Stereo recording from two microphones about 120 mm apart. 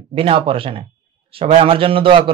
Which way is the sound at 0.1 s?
50° right (ahead or behind).